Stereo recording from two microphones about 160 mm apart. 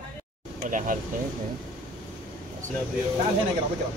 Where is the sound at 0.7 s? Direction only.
55° right (ahead or behind).